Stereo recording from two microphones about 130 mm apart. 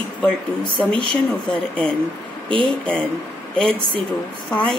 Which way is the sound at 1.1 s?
10° left (ahead or behind).